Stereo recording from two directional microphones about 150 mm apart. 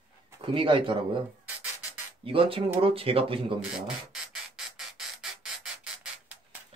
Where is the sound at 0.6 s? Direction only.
35° right (ahead or behind).